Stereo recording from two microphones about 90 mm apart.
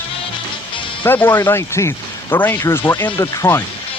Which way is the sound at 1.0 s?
25° left (ahead or behind).